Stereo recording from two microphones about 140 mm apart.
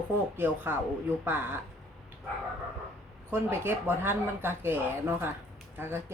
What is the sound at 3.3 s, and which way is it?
Speech, 15° right (ahead or behind).